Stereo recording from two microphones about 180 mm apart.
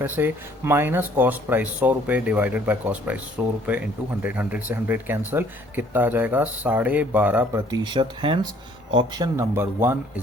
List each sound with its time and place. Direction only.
0.0 s speech: 10° right (ahead or behind)
7.7 s speech: 25° right (ahead or behind)